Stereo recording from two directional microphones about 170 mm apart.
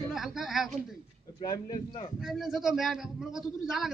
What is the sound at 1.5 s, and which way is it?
Speech, 25° left (ahead or behind).